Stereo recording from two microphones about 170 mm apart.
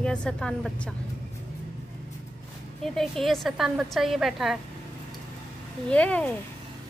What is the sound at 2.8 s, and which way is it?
A woman's voice, centre (ahead or behind).